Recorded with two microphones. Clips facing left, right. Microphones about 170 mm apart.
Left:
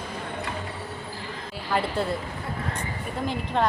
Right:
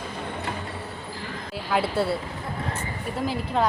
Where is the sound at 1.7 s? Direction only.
10° right (ahead or behind).